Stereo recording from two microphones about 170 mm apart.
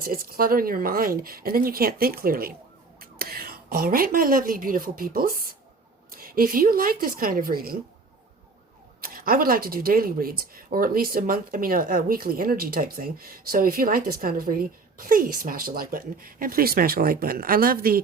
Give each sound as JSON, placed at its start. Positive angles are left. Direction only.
{"t": 0.0, "sound": "a woman's voice", "side_deg": -60}
{"t": 9.0, "sound": "speech", "side_deg": -60}